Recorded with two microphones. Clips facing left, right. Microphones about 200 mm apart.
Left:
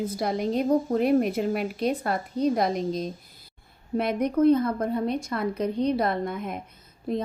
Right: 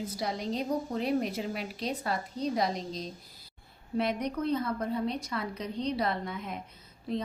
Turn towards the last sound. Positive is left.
turn(degrees=50)  # may be behind; listen again after turning